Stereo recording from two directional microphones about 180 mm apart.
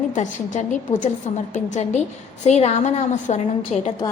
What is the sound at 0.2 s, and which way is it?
A woman's voice, 45° left (ahead or behind).